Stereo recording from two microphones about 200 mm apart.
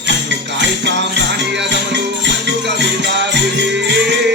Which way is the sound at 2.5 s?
60° right (ahead or behind).